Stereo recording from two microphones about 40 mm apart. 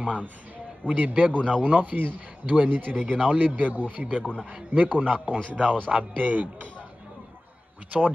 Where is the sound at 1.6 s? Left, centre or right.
Right.